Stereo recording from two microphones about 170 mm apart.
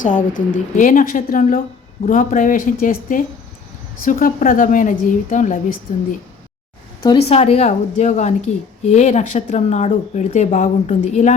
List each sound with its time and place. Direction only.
0.0 s a woman's voice: 50° left (ahead or behind)
7.3 s a woman's voice: 40° left (ahead or behind)